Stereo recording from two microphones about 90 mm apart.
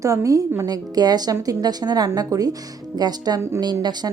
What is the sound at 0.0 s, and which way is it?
A woman's voice, 35° right (ahead or behind).